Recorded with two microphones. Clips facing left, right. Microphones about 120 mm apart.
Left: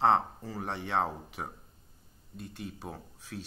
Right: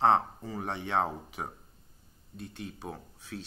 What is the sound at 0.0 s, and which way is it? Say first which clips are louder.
Speech: right 1 dB; centre (ahead or behind).